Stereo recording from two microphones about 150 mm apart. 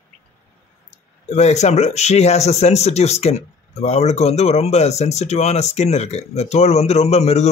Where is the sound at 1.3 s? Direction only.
50° left (ahead or behind).